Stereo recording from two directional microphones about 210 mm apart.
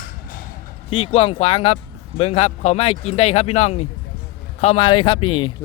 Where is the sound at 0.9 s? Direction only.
25° left (ahead or behind).